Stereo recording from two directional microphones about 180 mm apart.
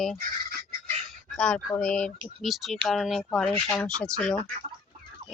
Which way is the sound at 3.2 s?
10° left (ahead or behind).